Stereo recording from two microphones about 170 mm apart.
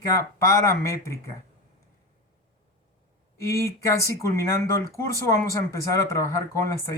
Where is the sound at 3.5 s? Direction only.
15° left (ahead or behind).